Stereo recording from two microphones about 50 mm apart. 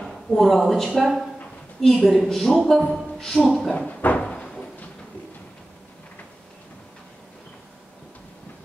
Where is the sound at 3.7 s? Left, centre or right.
Left.